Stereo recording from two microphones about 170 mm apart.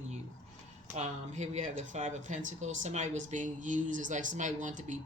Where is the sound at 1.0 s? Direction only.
45° right (ahead or behind).